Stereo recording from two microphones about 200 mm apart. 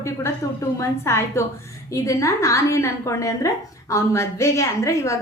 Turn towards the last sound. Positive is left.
turn(degrees=15)  # may be behind; listen again after turning